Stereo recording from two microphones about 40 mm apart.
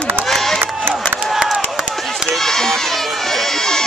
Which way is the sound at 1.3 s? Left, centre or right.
Centre.